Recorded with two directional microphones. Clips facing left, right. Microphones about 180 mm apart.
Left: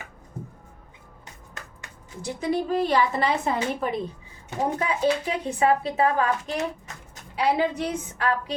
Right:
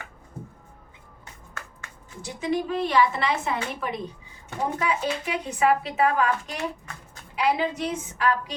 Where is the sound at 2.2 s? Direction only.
40° left (ahead or behind).